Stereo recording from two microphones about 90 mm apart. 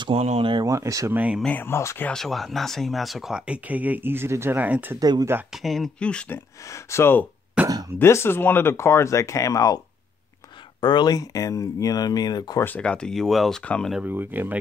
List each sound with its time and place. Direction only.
0.0 s speech: 80° right
0.7 s speech: 35° right (ahead or behind)
1.1 s speech: 15° right (ahead or behind)
1.4 s speech: 20° left (ahead or behind)
2.1 s speech: centre (ahead or behind); by 4.9 s 20° right (ahead or behind)
5.5 s speech: centre (ahead or behind)
5.9 s speech: 10° left (ahead or behind)
6.7 s speech: 30° left (ahead or behind)
7.6 s cough: 10° right (ahead or behind)
8.0 s speech: 30° left (ahead or behind)
10.8 s speech: 55° left (ahead or behind)
12.6 s speech: 15° left (ahead or behind)
14.0 s speech: 20° right (ahead or behind)